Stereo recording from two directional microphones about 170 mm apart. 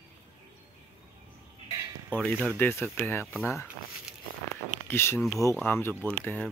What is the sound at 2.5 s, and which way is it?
Speech, 10° left (ahead or behind).